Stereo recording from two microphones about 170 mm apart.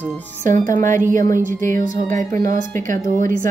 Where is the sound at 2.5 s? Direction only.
50° right (ahead or behind).